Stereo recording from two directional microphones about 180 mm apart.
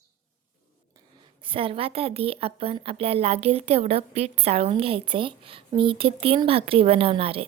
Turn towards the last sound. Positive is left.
turn(degrees=-30)  # may be behind; listen again after turning